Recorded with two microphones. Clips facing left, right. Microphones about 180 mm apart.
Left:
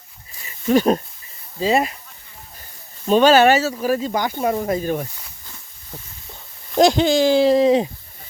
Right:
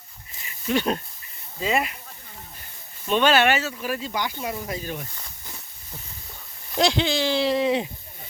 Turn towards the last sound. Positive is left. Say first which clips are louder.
# left 8 dB
turn(degrees=40)  # may be behind; listen again after turning